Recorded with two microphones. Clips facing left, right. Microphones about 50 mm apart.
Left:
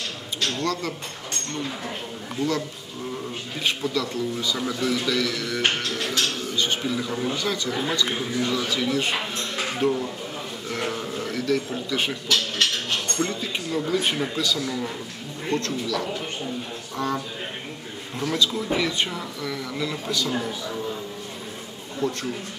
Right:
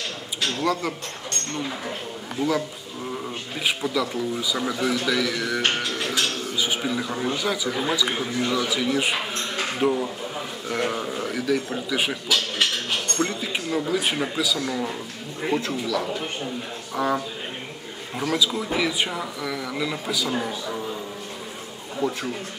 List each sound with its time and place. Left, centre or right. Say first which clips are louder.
0.4 s speech: right 2 dB; centre
2.4 s speech: right 1 dB; centre
3.6 s speech: right 1 dB; centre
9.4 s a sound: right 1 dB; centre
10.7 s speech: right 3 dB; centre
14.6 s speech: right 1 dB; centre
15.4 s speech: right 1 dB; centre
22.0 s speech: right 1 dB; centre